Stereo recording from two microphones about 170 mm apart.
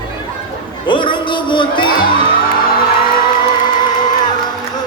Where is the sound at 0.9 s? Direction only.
30° left (ahead or behind).